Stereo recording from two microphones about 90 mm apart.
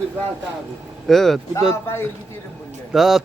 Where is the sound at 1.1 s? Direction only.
5° left (ahead or behind).